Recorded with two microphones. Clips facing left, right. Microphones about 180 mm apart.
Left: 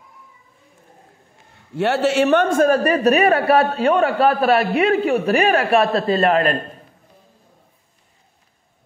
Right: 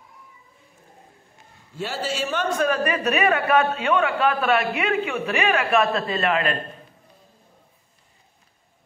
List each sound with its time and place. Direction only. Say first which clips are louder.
1.8 s a man's voice: left 11 dB; 70° left (ahead or behind); by 6.6 s 40° left (ahead or behind)